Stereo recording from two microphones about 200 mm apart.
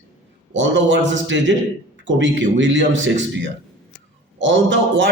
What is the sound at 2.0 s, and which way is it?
Speech, 65° right (ahead or behind).